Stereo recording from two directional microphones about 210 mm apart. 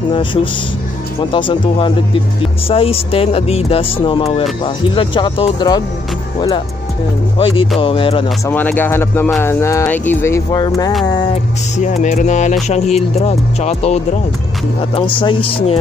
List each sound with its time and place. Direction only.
0.1 s speech: 25° left (ahead or behind)
7.3 s speech: 25° left (ahead or behind)
8.5 s speech: 10° left (ahead or behind)
11.8 s speech: 35° left (ahead or behind)